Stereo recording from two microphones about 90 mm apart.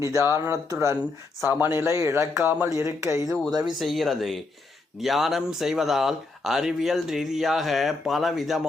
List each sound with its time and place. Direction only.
0.3 s a man's voice: 30° right (ahead or behind)
2.6 s speech: 35° right (ahead or behind)
3.2 s speech: 5° right (ahead or behind)